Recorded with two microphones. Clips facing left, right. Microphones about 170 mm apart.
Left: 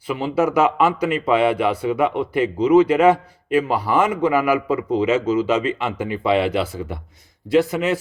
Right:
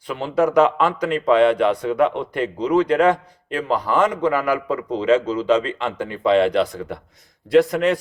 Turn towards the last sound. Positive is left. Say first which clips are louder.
# right 2 dB
turn(degrees=5)  # may be behind; listen again after turning